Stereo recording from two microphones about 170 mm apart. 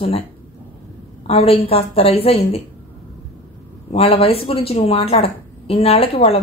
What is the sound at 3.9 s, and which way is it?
A man's voice, 35° left (ahead or behind).